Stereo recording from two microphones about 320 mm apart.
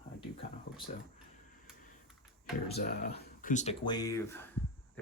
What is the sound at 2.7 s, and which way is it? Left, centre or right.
Speech, left.